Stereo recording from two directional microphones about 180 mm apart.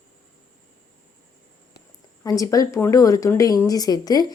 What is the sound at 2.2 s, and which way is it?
Speech, 20° left (ahead or behind).